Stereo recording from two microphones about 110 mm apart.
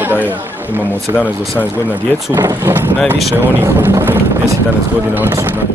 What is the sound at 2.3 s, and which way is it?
Speech, 25° right (ahead or behind).